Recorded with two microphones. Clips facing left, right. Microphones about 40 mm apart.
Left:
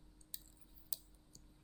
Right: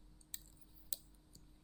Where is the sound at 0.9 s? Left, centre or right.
Right.